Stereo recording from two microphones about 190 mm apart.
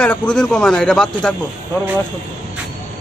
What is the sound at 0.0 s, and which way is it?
A man's voice, 5° left (ahead or behind).